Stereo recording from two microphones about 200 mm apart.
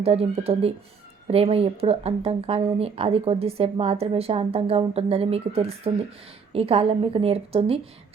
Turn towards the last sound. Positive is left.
turn(degrees=-30)  # may be behind; listen again after turning